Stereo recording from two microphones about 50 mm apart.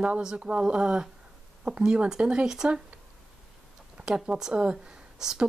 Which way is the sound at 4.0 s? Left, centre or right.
Centre.